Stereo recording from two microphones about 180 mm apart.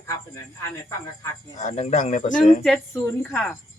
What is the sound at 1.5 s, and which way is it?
Speech, 40° left (ahead or behind).